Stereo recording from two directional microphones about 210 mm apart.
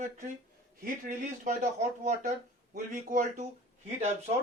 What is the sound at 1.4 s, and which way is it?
Speech, 35° right (ahead or behind).